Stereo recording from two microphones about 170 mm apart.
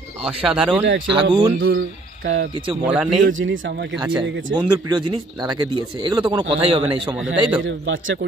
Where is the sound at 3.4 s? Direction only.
90° right.